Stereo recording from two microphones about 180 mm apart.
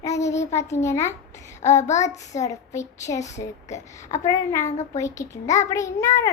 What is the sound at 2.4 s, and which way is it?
A child's voice, 15° left (ahead or behind).